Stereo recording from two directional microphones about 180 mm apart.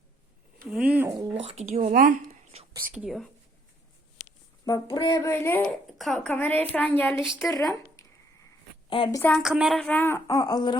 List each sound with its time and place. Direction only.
0.7 s speech: 10° right (ahead or behind)
1.3 s speech: 35° right (ahead or behind)
2.9 s speech: 5° right (ahead or behind)
4.6 s a woman's voice: 20° left (ahead or behind)
9.1 s a woman's voice: 10° left (ahead or behind)
9.4 s a woman's voice: 5° right (ahead or behind); by 10.8 s 25° left (ahead or behind)